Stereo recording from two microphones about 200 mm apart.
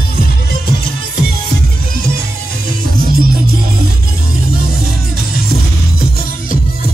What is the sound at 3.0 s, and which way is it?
Music, 50° right (ahead or behind).